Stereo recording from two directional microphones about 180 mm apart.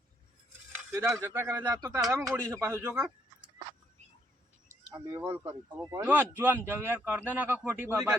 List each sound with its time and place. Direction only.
0.9 s speech: 15° right (ahead or behind)
4.7 s speech: 20° right (ahead or behind)